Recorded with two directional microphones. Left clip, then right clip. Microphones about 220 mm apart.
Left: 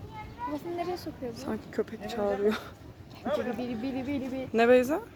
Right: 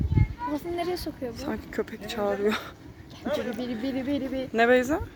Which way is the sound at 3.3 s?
30° right (ahead or behind).